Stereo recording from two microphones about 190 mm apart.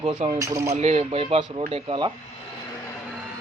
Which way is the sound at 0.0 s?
25° right (ahead or behind).